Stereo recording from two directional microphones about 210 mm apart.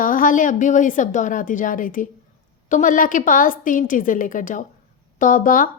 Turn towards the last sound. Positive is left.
turn(degrees=40)  # may be behind; listen again after turning